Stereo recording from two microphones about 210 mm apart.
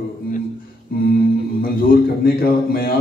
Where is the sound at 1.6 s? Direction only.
45° left (ahead or behind).